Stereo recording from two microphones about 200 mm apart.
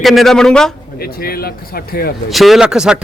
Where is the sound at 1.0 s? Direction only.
50° left (ahead or behind).